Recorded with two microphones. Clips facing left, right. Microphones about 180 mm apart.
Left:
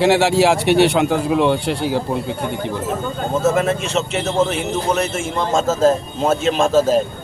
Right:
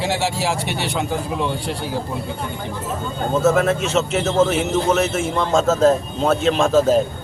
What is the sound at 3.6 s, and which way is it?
Speech, centre (ahead or behind).